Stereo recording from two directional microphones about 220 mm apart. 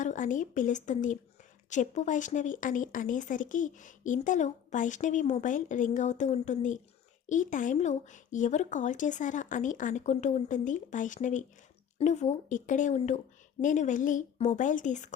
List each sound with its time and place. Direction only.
0.0 s speech: 35° left (ahead or behind)